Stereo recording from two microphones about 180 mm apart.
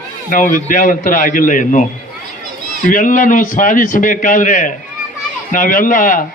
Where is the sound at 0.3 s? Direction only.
50° left (ahead or behind).